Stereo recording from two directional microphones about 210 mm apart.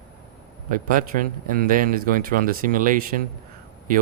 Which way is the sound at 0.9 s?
40° right (ahead or behind).